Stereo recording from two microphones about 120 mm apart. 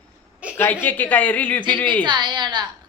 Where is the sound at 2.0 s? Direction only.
40° right (ahead or behind).